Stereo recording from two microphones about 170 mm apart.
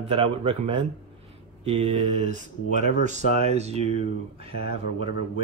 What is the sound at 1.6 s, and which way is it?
Speech, 35° right (ahead or behind).